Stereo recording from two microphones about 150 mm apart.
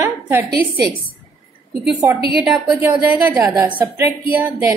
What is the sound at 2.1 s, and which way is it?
Speech, 90° right.